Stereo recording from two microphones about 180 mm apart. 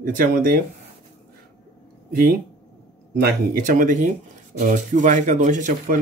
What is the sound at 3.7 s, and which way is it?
Speech, 45° right (ahead or behind).